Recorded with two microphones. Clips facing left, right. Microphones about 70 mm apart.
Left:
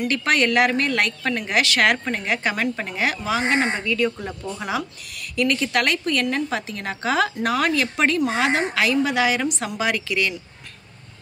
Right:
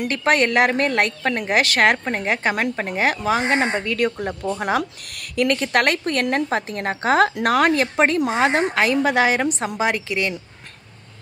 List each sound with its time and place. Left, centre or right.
0.1 s a woman's voice: right